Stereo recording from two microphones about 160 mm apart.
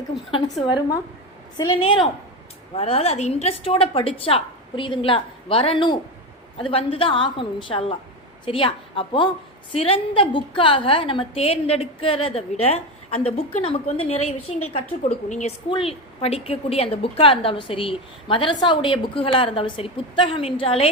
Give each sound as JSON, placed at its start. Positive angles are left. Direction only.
{"t": 1.5, "sound": "a woman's voice", "side_deg": 30}